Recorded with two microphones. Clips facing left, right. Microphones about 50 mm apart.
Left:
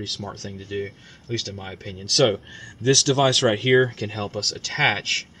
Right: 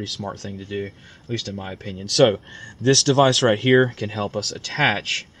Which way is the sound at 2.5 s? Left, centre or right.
Right.